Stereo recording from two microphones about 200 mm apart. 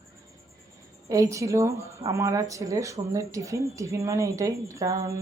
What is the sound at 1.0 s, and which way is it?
Speech, 15° right (ahead or behind).